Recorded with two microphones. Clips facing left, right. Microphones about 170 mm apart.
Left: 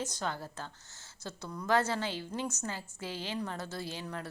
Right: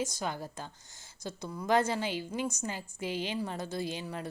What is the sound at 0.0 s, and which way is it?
A woman's voice, 10° right (ahead or behind).